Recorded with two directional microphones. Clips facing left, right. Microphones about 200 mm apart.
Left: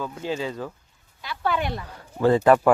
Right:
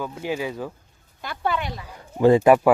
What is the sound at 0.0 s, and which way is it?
Speech, 10° right (ahead or behind).